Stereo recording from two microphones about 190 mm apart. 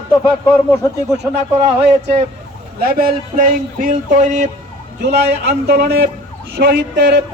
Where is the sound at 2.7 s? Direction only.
50° right (ahead or behind).